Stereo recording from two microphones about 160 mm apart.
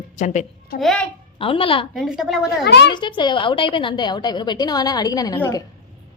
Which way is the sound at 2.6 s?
90° left.